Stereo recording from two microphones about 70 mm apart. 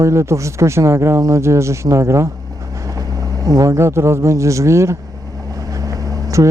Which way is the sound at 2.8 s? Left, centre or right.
Right.